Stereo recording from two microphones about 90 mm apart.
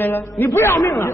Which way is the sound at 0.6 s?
30° left (ahead or behind).